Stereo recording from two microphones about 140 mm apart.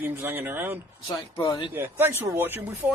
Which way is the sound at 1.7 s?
15° right (ahead or behind).